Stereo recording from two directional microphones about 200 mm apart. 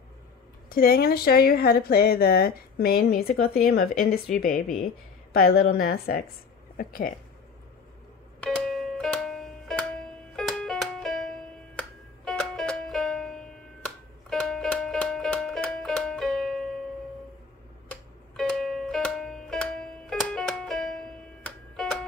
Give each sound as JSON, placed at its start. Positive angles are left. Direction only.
{"t": 0.7, "sound": "speech", "side_deg": 45}
{"t": 5.7, "sound": "speech", "side_deg": 50}
{"t": 8.4, "sound": "music", "side_deg": 0}
{"t": 12.3, "sound": "music", "side_deg": 0}
{"t": 17.8, "sound": "music", "side_deg": 5}